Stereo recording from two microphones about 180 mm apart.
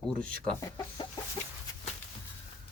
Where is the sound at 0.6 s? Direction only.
20° left (ahead or behind).